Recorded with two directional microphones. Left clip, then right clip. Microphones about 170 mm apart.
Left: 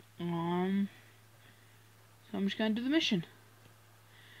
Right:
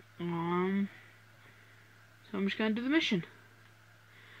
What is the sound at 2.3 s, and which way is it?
Speech, 25° left (ahead or behind).